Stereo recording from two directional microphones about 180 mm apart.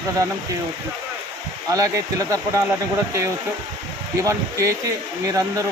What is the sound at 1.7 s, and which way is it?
Speech, 20° right (ahead or behind).